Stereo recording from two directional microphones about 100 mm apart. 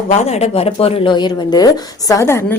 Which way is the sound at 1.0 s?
50° left (ahead or behind).